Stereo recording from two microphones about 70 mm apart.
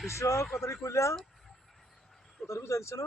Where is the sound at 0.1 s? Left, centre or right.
Left.